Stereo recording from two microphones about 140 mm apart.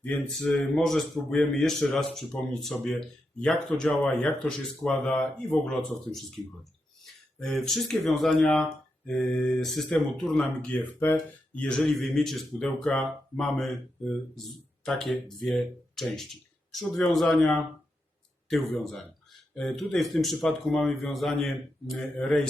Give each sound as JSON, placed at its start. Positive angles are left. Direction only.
{"t": 0.0, "sound": "speech", "side_deg": 5}
{"t": 7.3, "sound": "speech", "side_deg": 0}
{"t": 14.8, "sound": "speech", "side_deg": 0}